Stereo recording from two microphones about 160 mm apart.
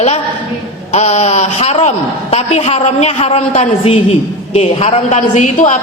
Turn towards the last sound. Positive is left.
turn(degrees=50)  # may be behind; listen again after turning